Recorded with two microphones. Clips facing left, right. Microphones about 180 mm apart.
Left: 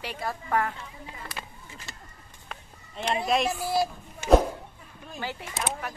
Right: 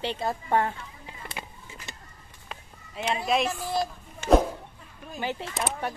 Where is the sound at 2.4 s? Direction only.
5° right (ahead or behind).